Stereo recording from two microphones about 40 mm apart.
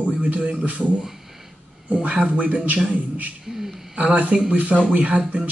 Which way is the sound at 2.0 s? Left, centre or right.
Right.